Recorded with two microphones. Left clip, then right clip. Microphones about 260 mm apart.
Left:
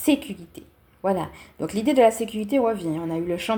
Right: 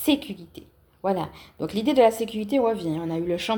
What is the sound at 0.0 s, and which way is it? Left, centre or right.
A woman's voice, centre.